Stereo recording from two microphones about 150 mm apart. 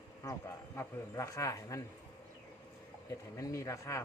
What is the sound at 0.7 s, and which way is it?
Speech, 20° left (ahead or behind).